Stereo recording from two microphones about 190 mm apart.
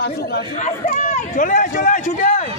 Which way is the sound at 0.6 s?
40° left (ahead or behind).